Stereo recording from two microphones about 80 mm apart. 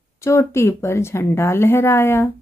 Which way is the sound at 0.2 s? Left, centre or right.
Left.